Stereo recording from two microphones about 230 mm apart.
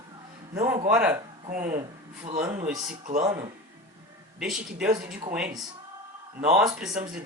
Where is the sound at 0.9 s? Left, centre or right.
Centre.